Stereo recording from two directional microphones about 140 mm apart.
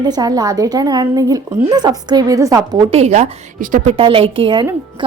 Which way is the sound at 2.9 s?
50° right (ahead or behind).